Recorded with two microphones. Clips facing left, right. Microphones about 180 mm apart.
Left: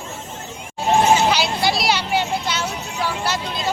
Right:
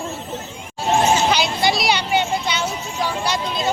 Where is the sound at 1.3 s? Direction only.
5° left (ahead or behind).